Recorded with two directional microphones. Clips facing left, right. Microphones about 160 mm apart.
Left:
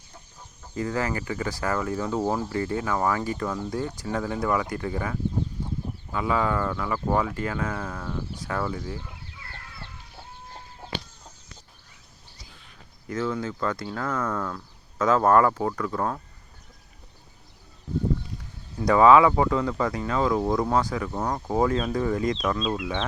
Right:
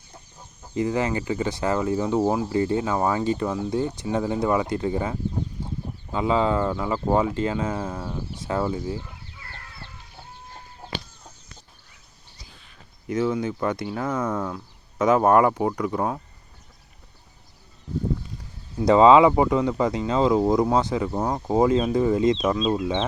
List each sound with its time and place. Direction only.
0.7 s speech: 20° right (ahead or behind)
13.1 s speech: 15° right (ahead or behind)
18.8 s speech: 20° right (ahead or behind)